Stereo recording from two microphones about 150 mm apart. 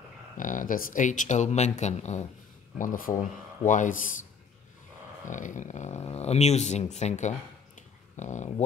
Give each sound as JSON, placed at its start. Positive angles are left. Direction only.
{"t": 0.4, "sound": "speech", "side_deg": 60}
{"t": 2.8, "sound": "speech", "side_deg": 65}
{"t": 5.3, "sound": "speech", "side_deg": 55}